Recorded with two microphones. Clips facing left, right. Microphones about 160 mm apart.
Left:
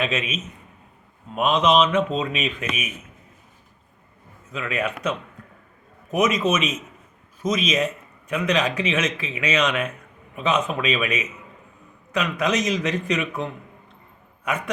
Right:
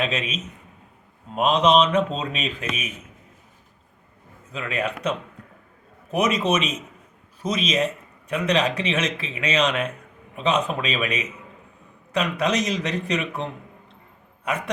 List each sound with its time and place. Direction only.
0.0 s speech: 35° right (ahead or behind)
1.4 s speech: 35° right (ahead or behind)
4.5 s speech: 30° right (ahead or behind)